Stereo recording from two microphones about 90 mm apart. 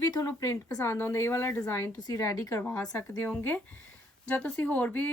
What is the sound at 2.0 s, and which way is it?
Speech, 40° left (ahead or behind).